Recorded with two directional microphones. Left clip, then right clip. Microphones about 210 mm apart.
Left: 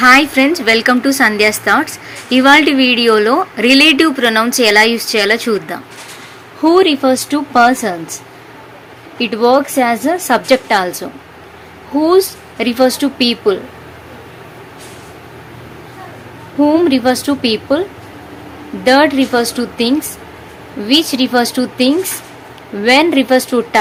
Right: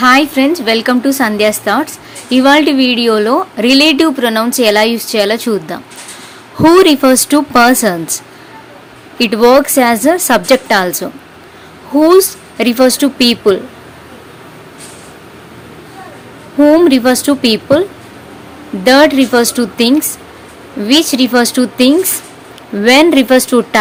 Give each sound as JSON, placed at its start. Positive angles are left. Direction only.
{"t": 0.0, "sound": "a woman's voice", "side_deg": -15}
{"t": 16.6, "sound": "a woman's voice", "side_deg": -20}
{"t": 18.9, "sound": "a woman's voice", "side_deg": -20}